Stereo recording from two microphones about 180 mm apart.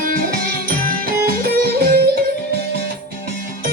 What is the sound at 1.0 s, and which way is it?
Music, 55° right (ahead or behind).